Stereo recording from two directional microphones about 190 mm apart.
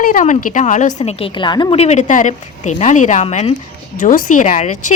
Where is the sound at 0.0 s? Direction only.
45° left (ahead or behind).